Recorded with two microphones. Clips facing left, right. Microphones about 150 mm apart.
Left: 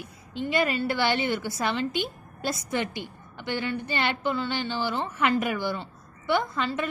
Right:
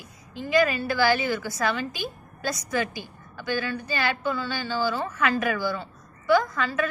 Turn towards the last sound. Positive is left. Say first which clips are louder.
# right 4 dB
turn(degrees=25)  # may be behind; listen again after turning